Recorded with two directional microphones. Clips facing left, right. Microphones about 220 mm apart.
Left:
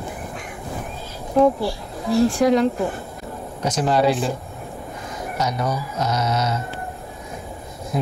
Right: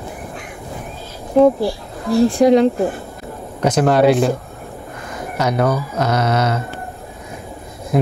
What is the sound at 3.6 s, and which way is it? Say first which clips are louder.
Speech: right 6 dB; 55° right (ahead or behind).